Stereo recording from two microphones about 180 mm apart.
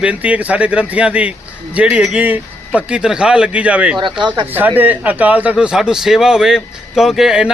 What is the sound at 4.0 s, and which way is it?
Speech, 25° right (ahead or behind).